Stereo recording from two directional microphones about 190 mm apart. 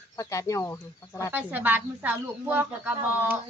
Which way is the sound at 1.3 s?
10° right (ahead or behind).